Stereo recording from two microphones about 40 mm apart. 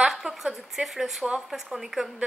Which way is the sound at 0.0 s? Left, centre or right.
Centre.